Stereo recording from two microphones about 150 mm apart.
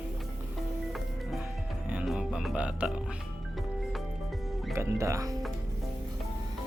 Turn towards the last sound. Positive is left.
turn(degrees=-20)  # may be behind; listen again after turning